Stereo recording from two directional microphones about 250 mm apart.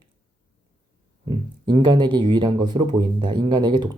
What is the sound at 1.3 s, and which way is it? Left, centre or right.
Speech, centre.